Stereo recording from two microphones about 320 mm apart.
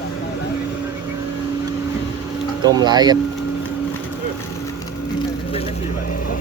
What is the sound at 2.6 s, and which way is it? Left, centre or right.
Speech, centre.